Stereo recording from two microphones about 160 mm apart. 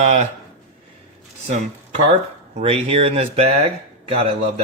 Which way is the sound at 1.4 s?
45° right (ahead or behind).